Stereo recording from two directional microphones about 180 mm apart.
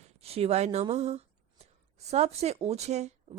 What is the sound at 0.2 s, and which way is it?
Speech, 35° right (ahead or behind).